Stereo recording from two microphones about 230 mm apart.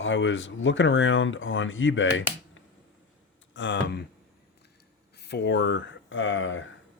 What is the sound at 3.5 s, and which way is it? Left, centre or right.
Speech, left.